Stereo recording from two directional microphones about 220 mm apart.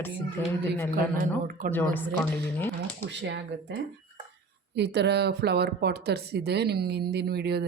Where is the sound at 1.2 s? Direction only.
40° right (ahead or behind).